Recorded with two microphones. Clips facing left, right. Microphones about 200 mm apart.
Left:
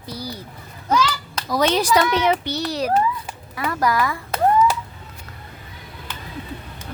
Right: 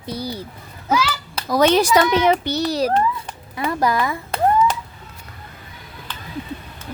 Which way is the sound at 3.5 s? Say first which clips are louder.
Right 1 dB; 25° right (ahead or behind).